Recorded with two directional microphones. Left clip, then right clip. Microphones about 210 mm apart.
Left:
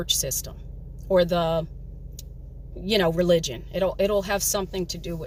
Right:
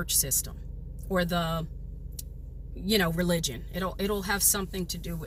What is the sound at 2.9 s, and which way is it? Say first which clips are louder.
Speech: left 7 dB; 10° left (ahead or behind).